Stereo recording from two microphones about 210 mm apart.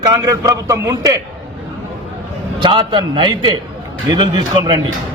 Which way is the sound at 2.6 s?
20° right (ahead or behind).